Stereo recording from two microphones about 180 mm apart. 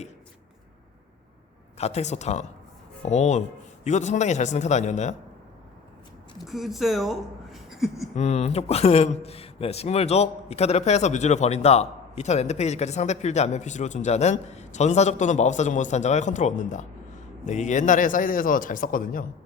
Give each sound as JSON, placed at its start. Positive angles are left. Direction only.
{"t": 1.8, "sound": "speech", "side_deg": 40}
{"t": 6.4, "sound": "speech", "side_deg": 0}
{"t": 8.1, "sound": "a man's voice", "side_deg": 40}